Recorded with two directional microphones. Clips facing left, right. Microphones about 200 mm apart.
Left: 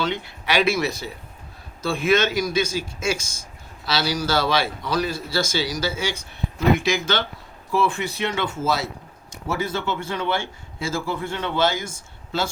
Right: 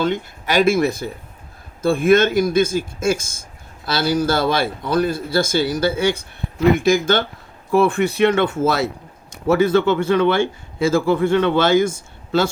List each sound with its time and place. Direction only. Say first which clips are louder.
0.0 s speech: right 5 dB; 50° right (ahead or behind)